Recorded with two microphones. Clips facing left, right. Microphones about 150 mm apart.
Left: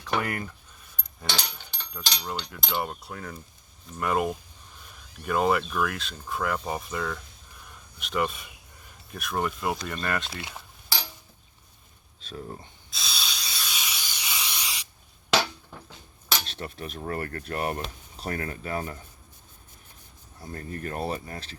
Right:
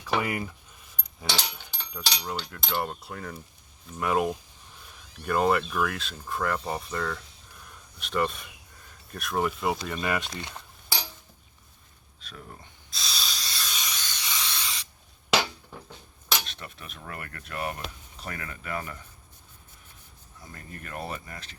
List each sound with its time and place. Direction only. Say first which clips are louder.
0.0 s speech: right 1 dB; 5° right (ahead or behind)
7.6 s a sound: left 1 dB; centre (ahead or behind)
9.1 s speech: right 1 dB; centre (ahead or behind)
10.2 s speech: even; 5° left (ahead or behind)
12.2 s speech: left 7 dB; 30° left (ahead or behind)
12.9 s a sound: even; centre (ahead or behind)
16.5 s speech: left 7 dB; 35° left (ahead or behind)
20.4 s speech: left 9 dB; 40° left (ahead or behind)